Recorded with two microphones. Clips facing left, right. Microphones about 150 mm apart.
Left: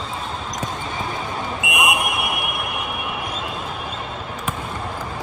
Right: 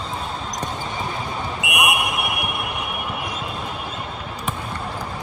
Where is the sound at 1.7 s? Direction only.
25° left (ahead or behind).